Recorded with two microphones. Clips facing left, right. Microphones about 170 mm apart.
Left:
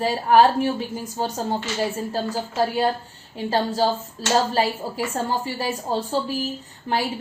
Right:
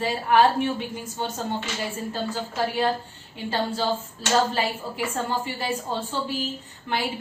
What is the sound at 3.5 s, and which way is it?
Speech, 40° left (ahead or behind).